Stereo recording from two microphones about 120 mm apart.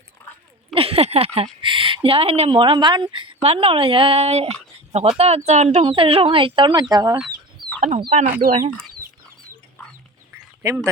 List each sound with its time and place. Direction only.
0.2 s a sound: 15° left (ahead or behind)
0.7 s a sound: 50° right (ahead or behind)
1.6 s speech: 45° right (ahead or behind); by 5.8 s 65° right (ahead or behind)
5.8 s speech: 50° right (ahead or behind)
7.6 s chicken: 40° right (ahead or behind)
8.1 s speech: 90° right
10.6 s speech: 25° right (ahead or behind)